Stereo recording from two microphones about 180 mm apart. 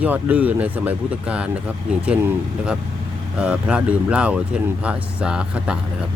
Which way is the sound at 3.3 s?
5° right (ahead or behind).